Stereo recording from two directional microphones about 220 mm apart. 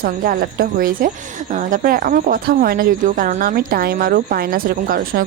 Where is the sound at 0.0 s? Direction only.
40° right (ahead or behind).